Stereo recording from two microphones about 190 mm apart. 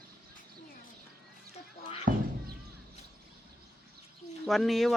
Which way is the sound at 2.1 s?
50° right (ahead or behind).